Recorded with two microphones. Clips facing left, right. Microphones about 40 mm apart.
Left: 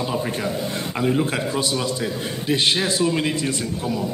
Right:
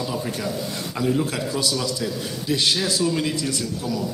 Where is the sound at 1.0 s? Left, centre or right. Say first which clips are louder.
Left 1 dB; left.